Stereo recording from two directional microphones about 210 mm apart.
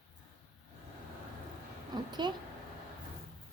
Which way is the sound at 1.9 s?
20° right (ahead or behind).